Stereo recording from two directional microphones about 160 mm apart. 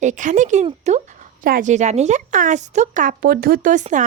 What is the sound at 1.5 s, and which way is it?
Speech, 55° right (ahead or behind).